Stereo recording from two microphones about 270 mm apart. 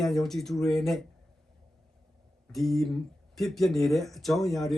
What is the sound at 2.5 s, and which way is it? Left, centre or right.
Speech, centre.